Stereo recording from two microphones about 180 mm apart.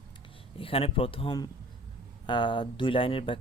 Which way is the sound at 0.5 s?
30° left (ahead or behind).